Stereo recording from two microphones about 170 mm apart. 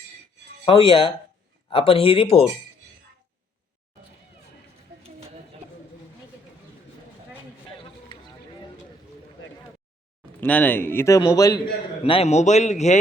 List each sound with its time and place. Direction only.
0.7 s a man's voice: 30° left (ahead or behind)
10.4 s speech: 10° left (ahead or behind)
12.0 s a man's voice: 35° left (ahead or behind)